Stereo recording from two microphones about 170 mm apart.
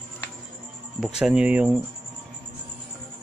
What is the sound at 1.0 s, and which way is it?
Speech, 5° right (ahead or behind).